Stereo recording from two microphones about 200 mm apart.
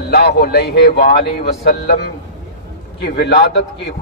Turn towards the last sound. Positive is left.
turn(degrees=55)  # may be behind; listen again after turning